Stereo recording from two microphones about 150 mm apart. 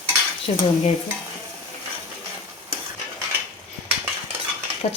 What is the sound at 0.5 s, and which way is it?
Speech, 45° left (ahead or behind).